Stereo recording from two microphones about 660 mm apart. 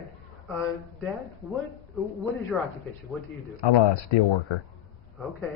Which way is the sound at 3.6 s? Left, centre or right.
Left.